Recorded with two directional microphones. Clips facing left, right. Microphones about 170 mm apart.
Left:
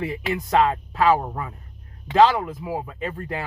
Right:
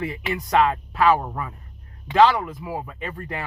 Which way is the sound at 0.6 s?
30° left (ahead or behind).